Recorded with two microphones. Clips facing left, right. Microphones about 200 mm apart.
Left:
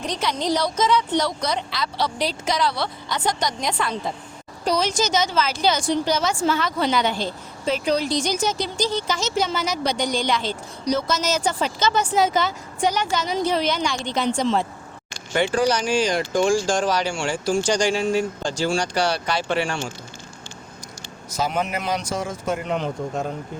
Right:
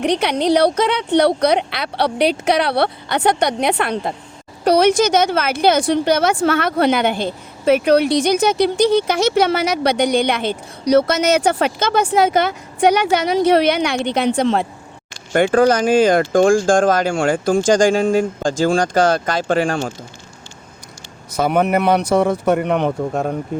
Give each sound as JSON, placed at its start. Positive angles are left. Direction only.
{"t": 0.0, "sound": "a woman's voice", "side_deg": -65}
{"t": 21.3, "sound": "a woman's voice", "side_deg": -60}